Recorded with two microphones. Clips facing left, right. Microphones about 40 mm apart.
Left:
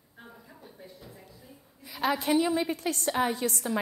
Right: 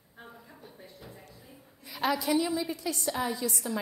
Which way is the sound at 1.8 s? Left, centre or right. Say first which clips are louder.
Left 1 dB; centre.